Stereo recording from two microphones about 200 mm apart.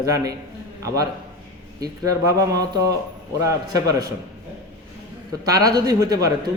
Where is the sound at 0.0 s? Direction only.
20° right (ahead or behind).